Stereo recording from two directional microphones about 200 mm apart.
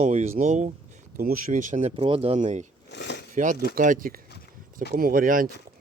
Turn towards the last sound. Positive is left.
turn(degrees=-45)  # may be behind; listen again after turning